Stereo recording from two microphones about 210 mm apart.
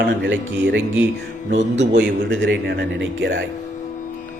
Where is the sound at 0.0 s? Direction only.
60° right (ahead or behind).